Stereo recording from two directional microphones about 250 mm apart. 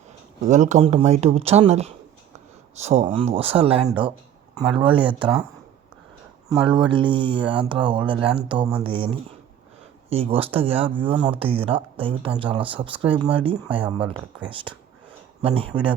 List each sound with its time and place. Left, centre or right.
0.4 s speech: right
6.5 s speech: centre